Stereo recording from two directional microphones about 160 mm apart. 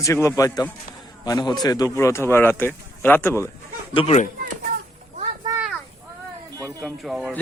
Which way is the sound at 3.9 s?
35° left (ahead or behind).